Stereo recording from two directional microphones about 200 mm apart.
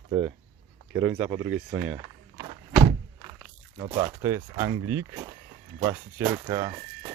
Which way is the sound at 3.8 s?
20° right (ahead or behind).